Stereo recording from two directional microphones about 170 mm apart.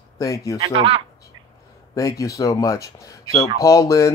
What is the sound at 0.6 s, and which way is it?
Speech, 30° right (ahead or behind).